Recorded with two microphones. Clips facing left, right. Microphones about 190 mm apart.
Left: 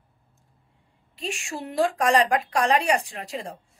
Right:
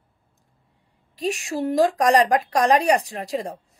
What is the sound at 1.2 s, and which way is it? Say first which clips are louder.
A woman's voice: right 8 dB; 40° right (ahead or behind).